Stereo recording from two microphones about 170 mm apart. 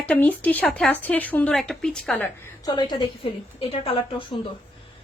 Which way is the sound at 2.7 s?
25° left (ahead or behind).